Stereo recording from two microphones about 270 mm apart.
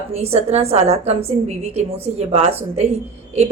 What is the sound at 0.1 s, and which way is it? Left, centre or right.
A woman's voice, right.